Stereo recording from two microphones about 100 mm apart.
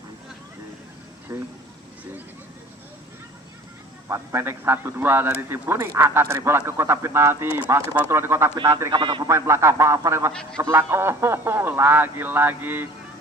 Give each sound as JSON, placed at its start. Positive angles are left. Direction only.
{"t": 1.3, "sound": "a man's voice", "side_deg": -25}
{"t": 4.1, "sound": "a man's voice", "side_deg": -30}
{"t": 8.6, "sound": "speech", "side_deg": -35}
{"t": 9.0, "sound": "speech", "side_deg": -50}
{"t": 9.2, "sound": "a man's voice", "side_deg": -30}